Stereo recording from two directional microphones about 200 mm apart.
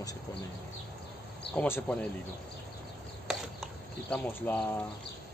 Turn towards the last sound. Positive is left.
turn(degrees=10)  # may be behind; listen again after turning